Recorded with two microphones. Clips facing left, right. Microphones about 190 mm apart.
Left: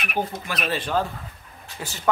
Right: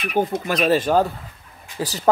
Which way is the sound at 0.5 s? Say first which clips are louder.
Right 9 dB; 45° right (ahead or behind).